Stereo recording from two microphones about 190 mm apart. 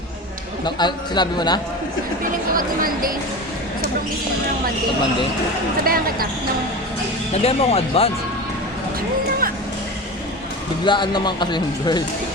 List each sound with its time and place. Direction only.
0.6 s speech: 25° left (ahead or behind)
2.2 s a woman's voice: 45° right (ahead or behind)
5.8 s a woman's voice: 50° right (ahead or behind)
7.3 s speech: 30° left (ahead or behind)
10.8 s speech: 25° left (ahead or behind)